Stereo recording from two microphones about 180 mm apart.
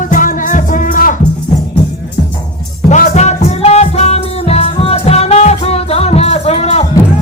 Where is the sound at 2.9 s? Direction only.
45° left (ahead or behind).